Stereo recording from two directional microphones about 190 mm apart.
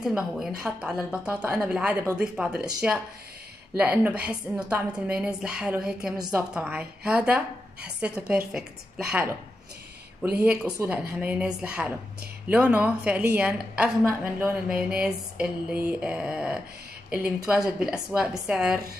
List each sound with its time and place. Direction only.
0.0 s a woman's voice: 5° right (ahead or behind)
6.1 s a woman's voice: 20° right (ahead or behind)
6.5 s a woman's voice: 5° right (ahead or behind)
10.4 s a woman's voice: 5° right (ahead or behind)